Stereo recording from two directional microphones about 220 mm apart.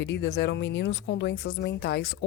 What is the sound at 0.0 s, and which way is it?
A woman's voice, 55° left (ahead or behind).